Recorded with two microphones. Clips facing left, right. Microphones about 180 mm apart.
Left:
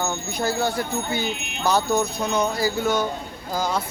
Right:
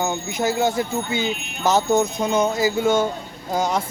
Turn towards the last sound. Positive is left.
turn(degrees=-20)  # may be behind; listen again after turning